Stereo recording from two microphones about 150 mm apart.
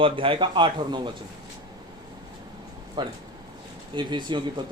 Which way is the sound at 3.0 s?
30° right (ahead or behind).